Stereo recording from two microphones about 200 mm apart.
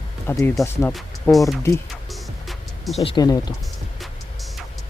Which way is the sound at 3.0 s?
20° left (ahead or behind).